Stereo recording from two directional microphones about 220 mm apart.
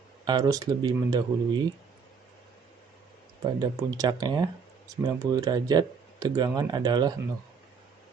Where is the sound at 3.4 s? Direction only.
15° right (ahead or behind).